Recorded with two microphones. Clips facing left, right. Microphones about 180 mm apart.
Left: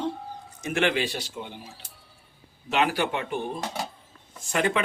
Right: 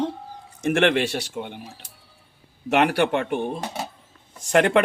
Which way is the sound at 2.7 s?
70° right (ahead or behind).